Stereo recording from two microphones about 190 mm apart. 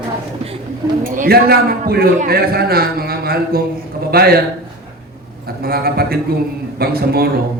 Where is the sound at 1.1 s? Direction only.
50° right (ahead or behind).